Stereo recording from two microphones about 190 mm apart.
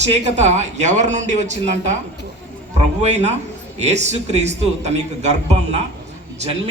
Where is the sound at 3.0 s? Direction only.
35° right (ahead or behind).